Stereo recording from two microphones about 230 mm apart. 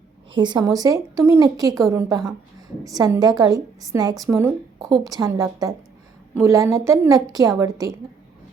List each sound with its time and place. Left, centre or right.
0.3 s a woman's voice: centre